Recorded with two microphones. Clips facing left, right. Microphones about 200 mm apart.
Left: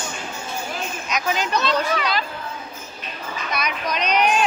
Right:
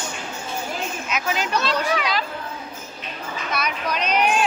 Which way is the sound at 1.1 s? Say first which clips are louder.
Left 2 dB; 5° right (ahead or behind).